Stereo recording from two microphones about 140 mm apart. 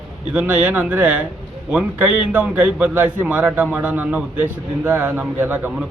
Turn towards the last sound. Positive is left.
turn(degrees=-10)  # may be behind; listen again after turning